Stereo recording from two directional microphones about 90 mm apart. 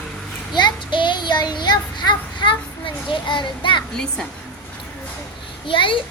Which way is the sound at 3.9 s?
5° left (ahead or behind).